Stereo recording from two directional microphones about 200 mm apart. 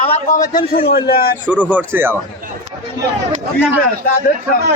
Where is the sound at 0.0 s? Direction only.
35° left (ahead or behind).